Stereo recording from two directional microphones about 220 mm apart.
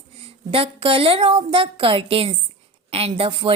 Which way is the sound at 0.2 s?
25° right (ahead or behind).